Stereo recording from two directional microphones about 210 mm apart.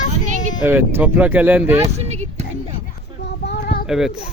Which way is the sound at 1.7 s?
30° right (ahead or behind).